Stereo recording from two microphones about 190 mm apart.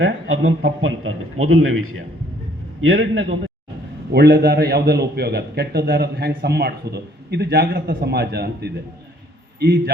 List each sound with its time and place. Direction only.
0.0 s a man's voice: 90° right
4.1 s a man's voice: 60° right (ahead or behind)